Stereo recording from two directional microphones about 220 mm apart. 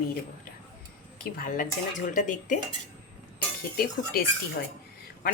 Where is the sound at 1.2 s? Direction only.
40° left (ahead or behind).